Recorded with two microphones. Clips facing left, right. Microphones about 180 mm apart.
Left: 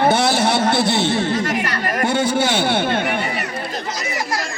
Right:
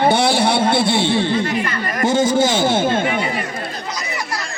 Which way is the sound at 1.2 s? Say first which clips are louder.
Right 1 dB; 45° left (ahead or behind).